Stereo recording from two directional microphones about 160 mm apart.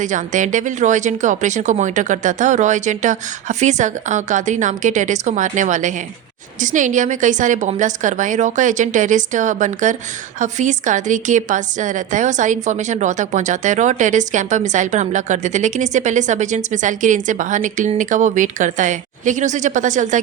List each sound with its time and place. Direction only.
0.0 s a woman's voice: 50° right (ahead or behind)